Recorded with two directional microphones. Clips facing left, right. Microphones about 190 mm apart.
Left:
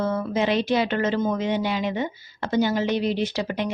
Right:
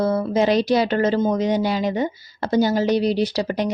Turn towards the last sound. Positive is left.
turn(degrees=-40)  # may be behind; listen again after turning